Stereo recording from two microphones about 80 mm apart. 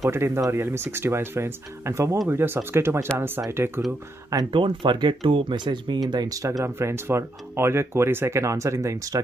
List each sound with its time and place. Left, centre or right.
0.0 s speech: right
4.5 s speech: right
6.6 s speech: right